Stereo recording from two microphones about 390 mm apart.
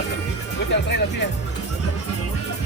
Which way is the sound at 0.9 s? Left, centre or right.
Left.